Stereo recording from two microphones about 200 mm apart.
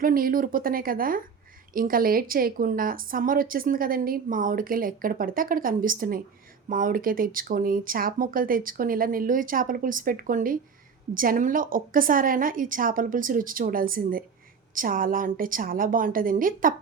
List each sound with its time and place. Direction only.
0.0 s a woman's voice: 45° right (ahead or behind)